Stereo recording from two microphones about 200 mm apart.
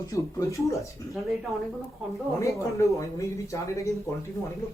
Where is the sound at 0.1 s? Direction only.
15° left (ahead or behind).